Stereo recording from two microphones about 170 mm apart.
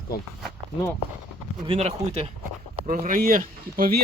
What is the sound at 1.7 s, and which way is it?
Speech, 35° right (ahead or behind).